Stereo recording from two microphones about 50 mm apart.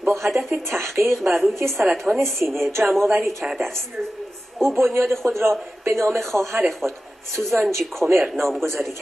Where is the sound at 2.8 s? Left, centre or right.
Right.